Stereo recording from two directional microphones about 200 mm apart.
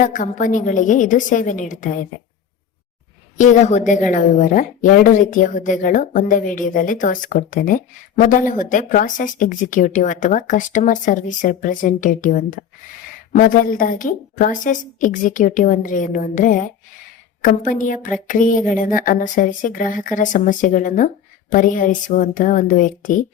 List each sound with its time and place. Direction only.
0.0 s a woman's voice: 40° left (ahead or behind)
3.3 s a woman's voice: 35° left (ahead or behind)